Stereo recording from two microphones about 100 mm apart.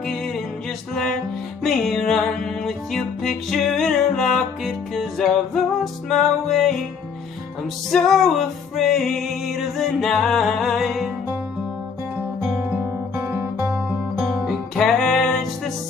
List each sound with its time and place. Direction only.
1.6 s music: centre (ahead or behind)
7.9 s music: centre (ahead or behind)
12.4 s guitar: 5° right (ahead or behind)
13.1 s music: 25° right (ahead or behind)
14.2 s music: centre (ahead or behind)